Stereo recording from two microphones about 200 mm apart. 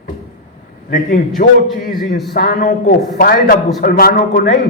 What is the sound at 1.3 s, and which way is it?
A man's voice, 45° left (ahead or behind).